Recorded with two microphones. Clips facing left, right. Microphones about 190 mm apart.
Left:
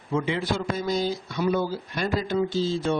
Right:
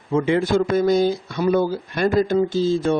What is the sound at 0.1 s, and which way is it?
Speech, 50° right (ahead or behind).